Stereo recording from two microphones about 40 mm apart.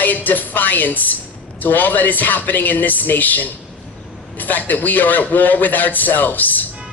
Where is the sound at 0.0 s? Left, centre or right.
Left.